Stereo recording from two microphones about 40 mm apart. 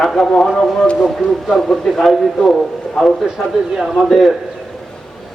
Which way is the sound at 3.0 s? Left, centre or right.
Centre.